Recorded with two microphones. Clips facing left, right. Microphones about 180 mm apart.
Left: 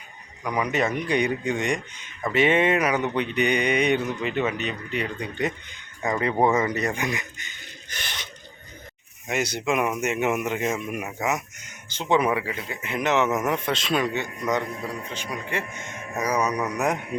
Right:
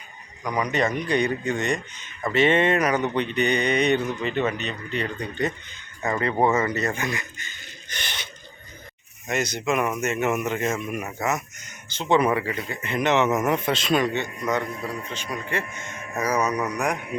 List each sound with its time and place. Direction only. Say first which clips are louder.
0.4 s speech: even; 5° left (ahead or behind)
7.9 s a sound: right 1 dB; centre (ahead or behind)
9.2 s speech: even; 10° left (ahead or behind)
16.5 s speech: right 1 dB; centre (ahead or behind)
16.7 s a man's voice: left 1 dB; 25° left (ahead or behind)